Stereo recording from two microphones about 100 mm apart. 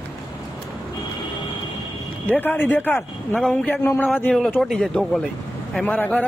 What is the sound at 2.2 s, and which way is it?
Speech, 15° left (ahead or behind).